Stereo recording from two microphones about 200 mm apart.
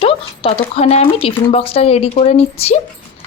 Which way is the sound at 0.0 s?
30° left (ahead or behind).